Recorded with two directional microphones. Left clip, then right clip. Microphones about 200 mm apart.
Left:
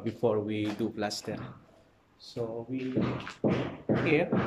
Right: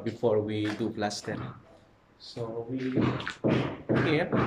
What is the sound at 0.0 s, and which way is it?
Speech, 5° left (ahead or behind).